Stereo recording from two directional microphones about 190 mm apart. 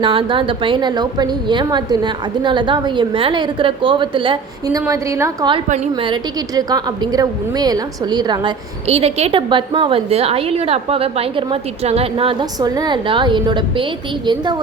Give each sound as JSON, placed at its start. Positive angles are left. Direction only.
{"t": 0.0, "sound": "a woman's voice", "side_deg": -25}
{"t": 5.6, "sound": "a woman's voice", "side_deg": -40}
{"t": 5.9, "sound": "a woman's voice", "side_deg": -20}